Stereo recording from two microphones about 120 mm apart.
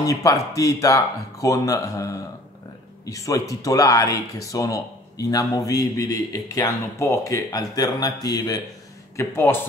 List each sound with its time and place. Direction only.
0.0 s speech: 25° left (ahead or behind)